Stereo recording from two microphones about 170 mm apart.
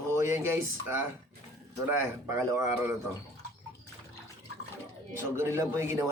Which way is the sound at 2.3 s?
15° right (ahead or behind).